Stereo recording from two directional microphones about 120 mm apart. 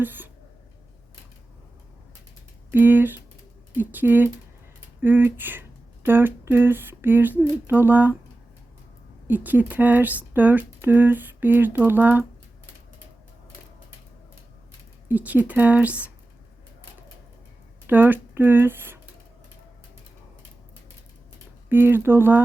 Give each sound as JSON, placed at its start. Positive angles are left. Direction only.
{"t": 0.0, "sound": "a sound", "side_deg": -15}
{"t": 2.7, "sound": "speech", "side_deg": -15}
{"t": 9.2, "sound": "speech", "side_deg": -15}
{"t": 15.0, "sound": "speech", "side_deg": -15}
{"t": 17.8, "sound": "speech", "side_deg": -15}
{"t": 21.7, "sound": "speech", "side_deg": -15}